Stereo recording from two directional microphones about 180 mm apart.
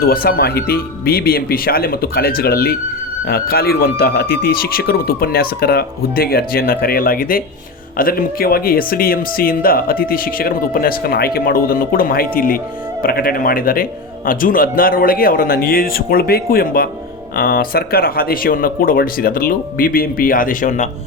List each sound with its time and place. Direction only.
0.0 s speech: 55° left (ahead or behind)